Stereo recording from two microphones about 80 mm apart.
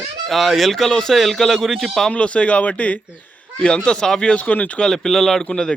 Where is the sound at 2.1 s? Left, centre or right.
Centre.